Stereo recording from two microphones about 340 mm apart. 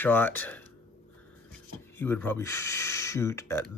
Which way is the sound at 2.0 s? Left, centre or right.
Centre.